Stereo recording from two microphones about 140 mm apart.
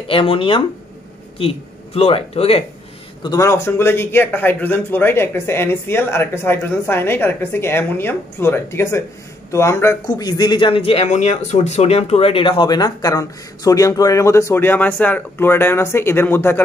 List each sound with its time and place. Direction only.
0.1 s speech: 40° left (ahead or behind)
3.2 s a man's voice: 25° left (ahead or behind)